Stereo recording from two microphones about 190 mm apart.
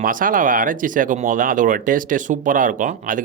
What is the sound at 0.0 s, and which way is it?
Speech, 45° right (ahead or behind).